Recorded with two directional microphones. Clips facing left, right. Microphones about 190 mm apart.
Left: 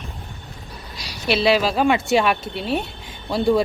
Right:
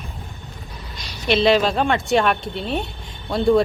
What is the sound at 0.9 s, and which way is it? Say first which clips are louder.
Speech: right 2 dB; 5° left (ahead or behind).